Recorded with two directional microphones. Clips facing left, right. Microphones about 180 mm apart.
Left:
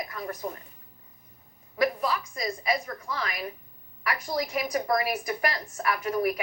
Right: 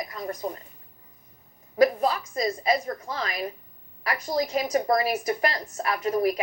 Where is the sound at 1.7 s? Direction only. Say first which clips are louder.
Right 5 dB; 30° right (ahead or behind).